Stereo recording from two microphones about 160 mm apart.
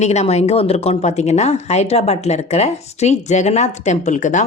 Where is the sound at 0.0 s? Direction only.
45° left (ahead or behind).